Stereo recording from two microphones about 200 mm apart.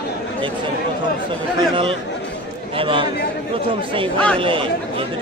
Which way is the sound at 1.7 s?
25° right (ahead or behind).